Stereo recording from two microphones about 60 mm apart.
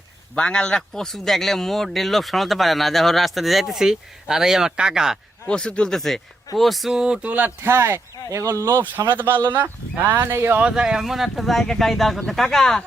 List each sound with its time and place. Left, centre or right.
0.3 s speech: centre
5.5 s speech: centre
7.3 s speech: right
7.7 s speech: right
8.6 s speech: right
10.1 s speech: right
10.6 s speech: centre